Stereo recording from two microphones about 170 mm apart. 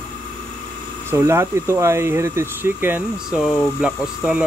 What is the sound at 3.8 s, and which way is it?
Speech, 5° right (ahead or behind).